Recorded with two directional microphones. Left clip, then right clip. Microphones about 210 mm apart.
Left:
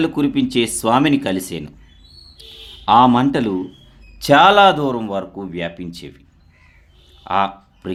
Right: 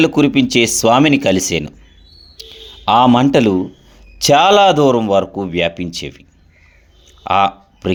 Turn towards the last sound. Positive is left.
turn(degrees=-30)  # may be behind; listen again after turning